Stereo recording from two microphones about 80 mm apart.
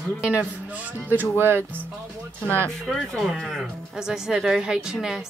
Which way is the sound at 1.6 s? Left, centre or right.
Centre.